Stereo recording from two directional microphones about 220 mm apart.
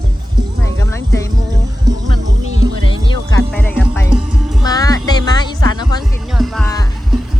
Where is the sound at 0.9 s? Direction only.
10° left (ahead or behind).